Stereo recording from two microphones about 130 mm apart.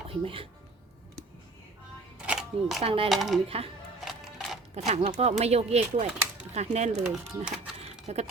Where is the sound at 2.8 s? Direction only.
45° right (ahead or behind).